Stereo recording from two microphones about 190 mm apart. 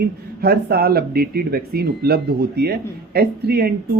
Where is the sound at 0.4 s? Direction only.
55° right (ahead or behind).